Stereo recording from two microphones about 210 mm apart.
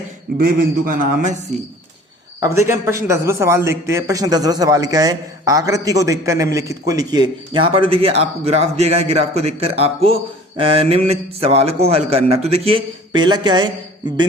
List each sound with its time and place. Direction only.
0.3 s a man's voice: 45° right (ahead or behind)
2.4 s a man's voice: 15° right (ahead or behind)